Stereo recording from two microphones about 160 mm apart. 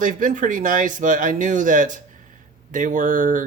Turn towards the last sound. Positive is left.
turn(degrees=-55)  # may be behind; listen again after turning